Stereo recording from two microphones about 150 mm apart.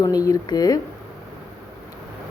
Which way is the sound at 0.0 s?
25° left (ahead or behind).